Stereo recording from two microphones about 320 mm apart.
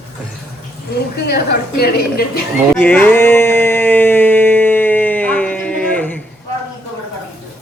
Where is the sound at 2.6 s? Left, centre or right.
Centre.